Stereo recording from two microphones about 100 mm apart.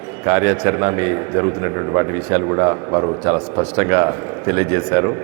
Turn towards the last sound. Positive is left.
turn(degrees=-30)  # may be behind; listen again after turning